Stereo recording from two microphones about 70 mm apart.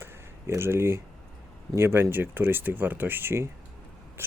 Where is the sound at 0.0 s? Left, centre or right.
Right.